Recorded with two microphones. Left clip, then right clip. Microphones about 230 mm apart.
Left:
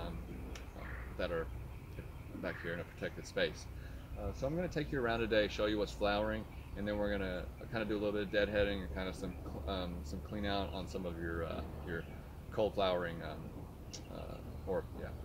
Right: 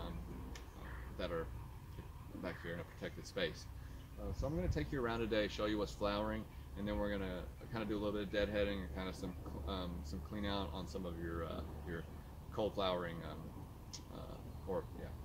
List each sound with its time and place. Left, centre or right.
1.2 s speech: centre
2.4 s speech: centre
14.7 s speech: centre